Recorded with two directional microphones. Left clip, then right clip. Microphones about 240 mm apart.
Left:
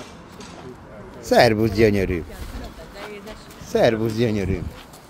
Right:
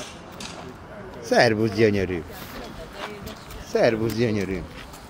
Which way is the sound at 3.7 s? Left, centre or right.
Centre.